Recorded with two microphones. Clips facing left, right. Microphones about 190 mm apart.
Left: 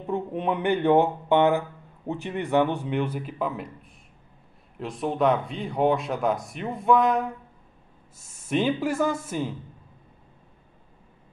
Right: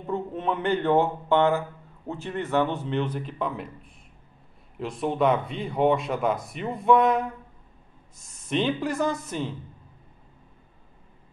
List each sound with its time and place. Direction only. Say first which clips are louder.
0.0 s a man's voice: left 1 dB; 15° left (ahead or behind); by 7.2 s centre (ahead or behind)
8.3 s a man's voice: left 1 dB; 10° left (ahead or behind)